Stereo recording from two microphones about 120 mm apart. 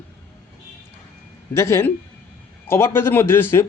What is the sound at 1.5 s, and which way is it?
Speech, 20° left (ahead or behind).